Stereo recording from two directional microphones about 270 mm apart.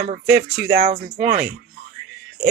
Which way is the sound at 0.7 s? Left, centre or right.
Right.